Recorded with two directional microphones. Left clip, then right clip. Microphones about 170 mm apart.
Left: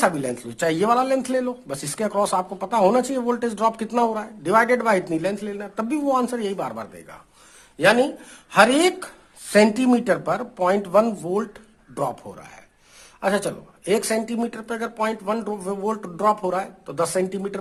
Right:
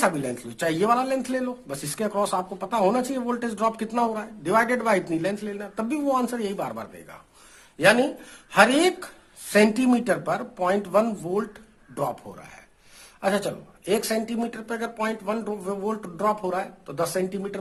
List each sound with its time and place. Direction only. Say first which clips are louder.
0.0 s a man's voice: left 3 dB; 30° left (ahead or behind)